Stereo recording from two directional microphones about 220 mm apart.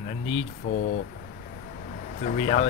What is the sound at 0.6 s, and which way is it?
Speech, 50° left (ahead or behind).